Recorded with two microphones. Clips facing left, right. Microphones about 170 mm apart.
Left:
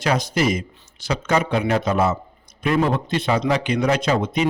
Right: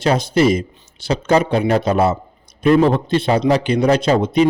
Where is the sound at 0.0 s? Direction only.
30° right (ahead or behind).